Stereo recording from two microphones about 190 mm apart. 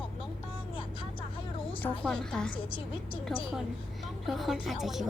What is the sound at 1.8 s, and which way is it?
A woman's voice, 5° left (ahead or behind).